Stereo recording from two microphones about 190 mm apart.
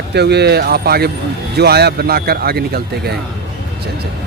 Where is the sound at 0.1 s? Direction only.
60° right (ahead or behind).